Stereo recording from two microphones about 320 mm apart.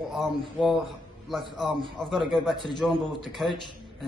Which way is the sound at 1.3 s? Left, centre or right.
Centre.